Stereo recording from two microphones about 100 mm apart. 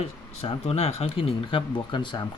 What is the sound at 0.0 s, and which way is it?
Speech, 80° left.